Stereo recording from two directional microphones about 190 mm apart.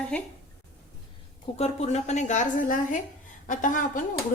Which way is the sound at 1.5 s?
35° left (ahead or behind).